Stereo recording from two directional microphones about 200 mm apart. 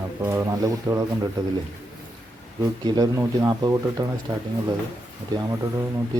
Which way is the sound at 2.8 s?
20° right (ahead or behind).